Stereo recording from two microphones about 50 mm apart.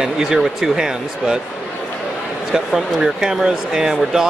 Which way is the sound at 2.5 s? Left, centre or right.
Centre.